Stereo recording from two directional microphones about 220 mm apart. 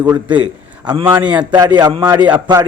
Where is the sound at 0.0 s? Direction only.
20° right (ahead or behind).